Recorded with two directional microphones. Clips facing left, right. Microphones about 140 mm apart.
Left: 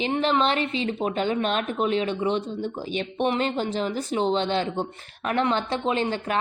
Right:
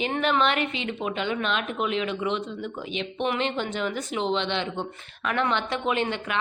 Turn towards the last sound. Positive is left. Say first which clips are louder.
# left 2 dB
turn(degrees=35)  # may be behind; listen again after turning